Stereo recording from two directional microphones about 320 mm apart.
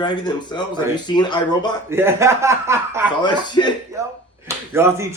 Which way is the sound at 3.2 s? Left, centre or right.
Centre.